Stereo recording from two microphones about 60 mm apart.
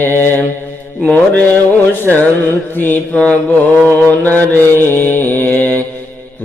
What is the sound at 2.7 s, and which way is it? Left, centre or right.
Mantra, left.